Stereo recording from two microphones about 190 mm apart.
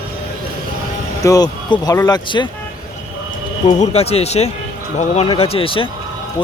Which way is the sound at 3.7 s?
35° left (ahead or behind).